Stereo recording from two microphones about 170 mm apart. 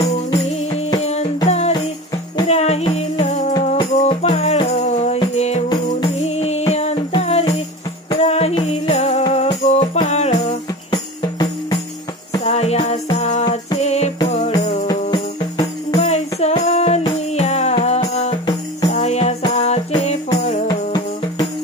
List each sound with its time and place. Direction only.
1.0 s music: 40° left (ahead or behind)
5.7 s music: 30° left (ahead or behind)
10.9 s music: 25° left (ahead or behind)
12.4 s music: 40° left (ahead or behind)
14.9 s music: 25° left (ahead or behind)
16.0 s music: 40° left (ahead or behind)
20.6 s music: 25° left (ahead or behind)